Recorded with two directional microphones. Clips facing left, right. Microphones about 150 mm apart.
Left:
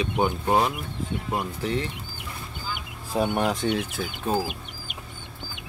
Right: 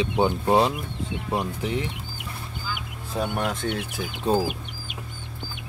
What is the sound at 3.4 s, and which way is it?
Speech, centre (ahead or behind).